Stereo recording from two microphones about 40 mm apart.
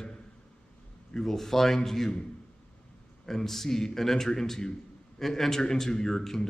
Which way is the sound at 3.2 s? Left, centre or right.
Centre.